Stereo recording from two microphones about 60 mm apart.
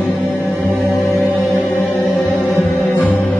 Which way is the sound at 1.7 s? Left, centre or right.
Left.